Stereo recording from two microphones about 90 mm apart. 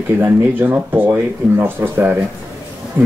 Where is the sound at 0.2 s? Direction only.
20° right (ahead or behind).